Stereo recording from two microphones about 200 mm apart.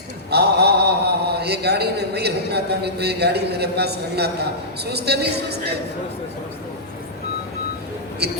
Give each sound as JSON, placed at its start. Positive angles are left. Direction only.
{"t": 0.3, "sound": "a man's voice", "side_deg": -55}
{"t": 8.2, "sound": "a man's voice", "side_deg": -55}